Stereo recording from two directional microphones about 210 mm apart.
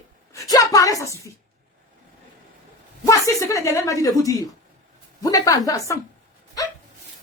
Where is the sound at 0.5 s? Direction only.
15° left (ahead or behind).